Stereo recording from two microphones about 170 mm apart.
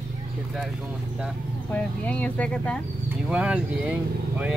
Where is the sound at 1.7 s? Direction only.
10° left (ahead or behind).